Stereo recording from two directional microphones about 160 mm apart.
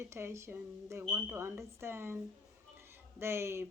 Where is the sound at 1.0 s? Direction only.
5° right (ahead or behind).